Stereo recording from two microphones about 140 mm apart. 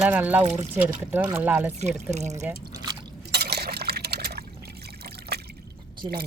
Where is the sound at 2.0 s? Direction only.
55° right (ahead or behind).